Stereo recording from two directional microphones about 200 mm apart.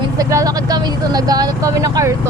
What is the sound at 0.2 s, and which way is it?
Speech, 15° right (ahead or behind).